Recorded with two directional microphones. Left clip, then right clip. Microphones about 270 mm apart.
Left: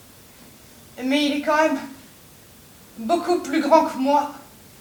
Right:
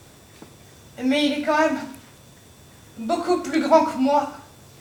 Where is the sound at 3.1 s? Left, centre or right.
Centre.